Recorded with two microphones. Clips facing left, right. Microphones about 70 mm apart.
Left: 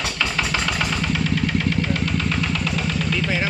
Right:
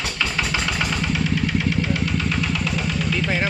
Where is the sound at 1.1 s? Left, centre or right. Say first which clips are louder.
Even; centre.